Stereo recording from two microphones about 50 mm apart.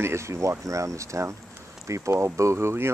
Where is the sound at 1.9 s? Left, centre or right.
Right.